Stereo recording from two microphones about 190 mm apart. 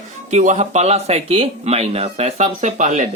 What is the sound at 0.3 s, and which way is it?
Speech, 40° right (ahead or behind).